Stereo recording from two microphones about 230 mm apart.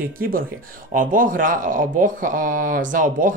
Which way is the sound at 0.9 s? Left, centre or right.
Right.